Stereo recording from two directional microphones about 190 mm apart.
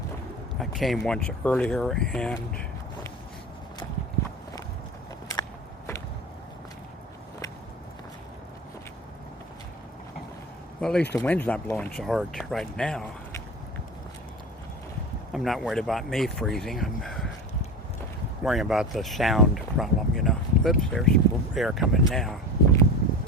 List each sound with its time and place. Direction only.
0.6 s speech: centre (ahead or behind)
5.3 s biting: 15° left (ahead or behind)
10.8 s speech: 5° left (ahead or behind)
15.3 s speech: centre (ahead or behind)
18.4 s speech: centre (ahead or behind)